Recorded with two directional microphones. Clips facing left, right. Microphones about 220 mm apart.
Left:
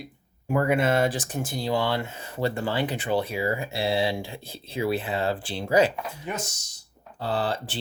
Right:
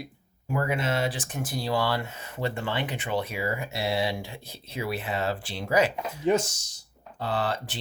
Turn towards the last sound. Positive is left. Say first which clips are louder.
# left 2 dB
turn(degrees=30)  # may be behind; listen again after turning